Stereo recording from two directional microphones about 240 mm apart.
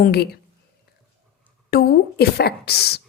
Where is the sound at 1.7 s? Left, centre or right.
Left.